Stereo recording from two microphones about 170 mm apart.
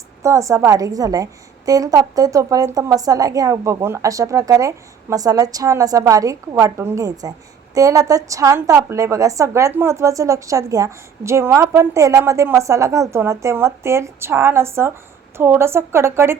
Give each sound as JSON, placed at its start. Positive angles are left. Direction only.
{"t": 0.2, "sound": "a woman's voice", "side_deg": -20}